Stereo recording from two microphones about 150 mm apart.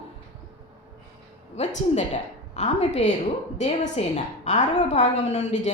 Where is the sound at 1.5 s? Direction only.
50° left (ahead or behind).